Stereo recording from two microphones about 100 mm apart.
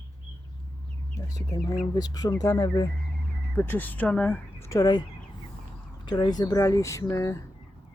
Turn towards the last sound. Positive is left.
turn(degrees=30)  # may be behind; listen again after turning